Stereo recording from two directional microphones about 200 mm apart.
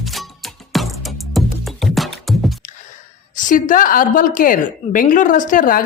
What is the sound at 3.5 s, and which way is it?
A woman's voice, 40° left (ahead or behind).